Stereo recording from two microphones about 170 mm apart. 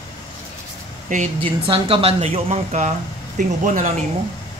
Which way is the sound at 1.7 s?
35° right (ahead or behind).